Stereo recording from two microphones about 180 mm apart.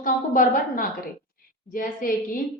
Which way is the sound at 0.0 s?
50° left (ahead or behind).